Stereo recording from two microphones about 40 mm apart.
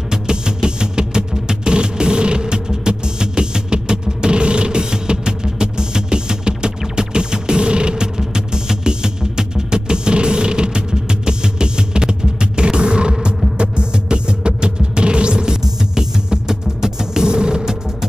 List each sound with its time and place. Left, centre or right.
0.1 s music: centre